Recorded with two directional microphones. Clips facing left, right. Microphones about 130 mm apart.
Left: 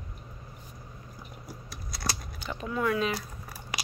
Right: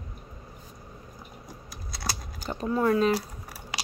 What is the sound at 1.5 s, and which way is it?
Scissors, centre (ahead or behind).